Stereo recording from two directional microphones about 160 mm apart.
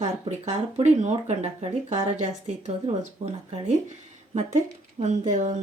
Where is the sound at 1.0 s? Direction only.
45° right (ahead or behind).